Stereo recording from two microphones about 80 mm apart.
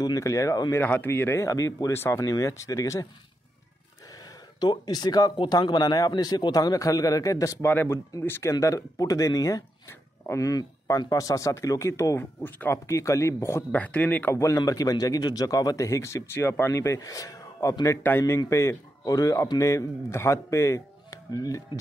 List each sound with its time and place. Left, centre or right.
0.0 s speech: left
0.7 s speech: left
1.9 s speech: left
4.6 s speech: left
7.6 s speech: left
9.8 s speech: left
13.7 s speech: centre
14.3 s speech: left
14.6 s speech: left
18.1 s speech: left
18.5 s speech: left
19.6 s speech: left